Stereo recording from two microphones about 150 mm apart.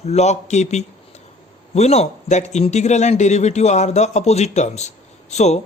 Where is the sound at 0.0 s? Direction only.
45° left (ahead or behind).